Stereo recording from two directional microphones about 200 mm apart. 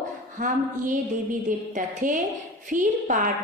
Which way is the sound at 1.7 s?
40° right (ahead or behind).